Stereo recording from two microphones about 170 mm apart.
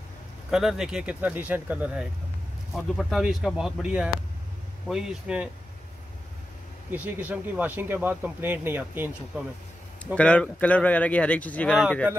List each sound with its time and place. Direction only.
0.5 s speech: centre (ahead or behind)
6.9 s speech: 10° right (ahead or behind)
10.1 s speech: 5° left (ahead or behind)